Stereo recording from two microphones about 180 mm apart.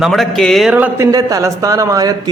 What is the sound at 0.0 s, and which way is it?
Speech, centre (ahead or behind).